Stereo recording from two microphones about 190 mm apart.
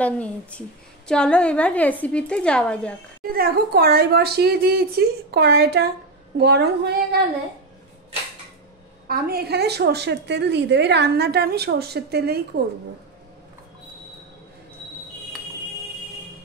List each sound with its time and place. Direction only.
0.0 s a woman's voice: 5° left (ahead or behind)
3.3 s a woman's voice: 50° right (ahead or behind)
9.0 s a woman's voice: 50° right (ahead or behind)